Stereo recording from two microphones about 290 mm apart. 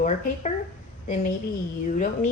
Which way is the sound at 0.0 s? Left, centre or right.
Left.